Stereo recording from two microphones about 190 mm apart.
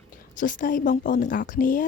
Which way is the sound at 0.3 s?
45° left (ahead or behind).